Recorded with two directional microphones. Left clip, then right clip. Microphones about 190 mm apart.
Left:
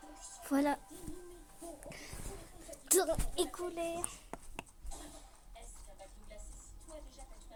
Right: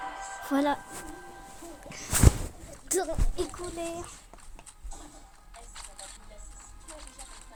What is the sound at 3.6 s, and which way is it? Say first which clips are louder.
Speech: right 3 dB; 20° right (ahead or behind).